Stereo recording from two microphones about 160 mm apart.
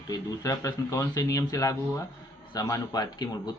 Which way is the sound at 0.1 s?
20° left (ahead or behind).